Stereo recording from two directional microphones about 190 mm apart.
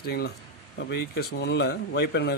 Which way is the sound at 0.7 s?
55° left (ahead or behind).